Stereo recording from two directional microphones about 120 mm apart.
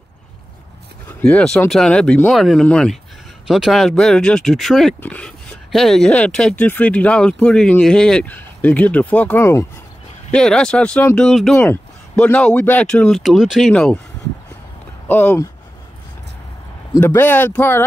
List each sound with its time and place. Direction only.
1.2 s speech: 5° left (ahead or behind)
10.3 s speech: 5° left (ahead or behind)
11.5 s speech: 15° left (ahead or behind)
15.0 s speech: 15° left (ahead or behind)
17.0 s speech: 15° left (ahead or behind)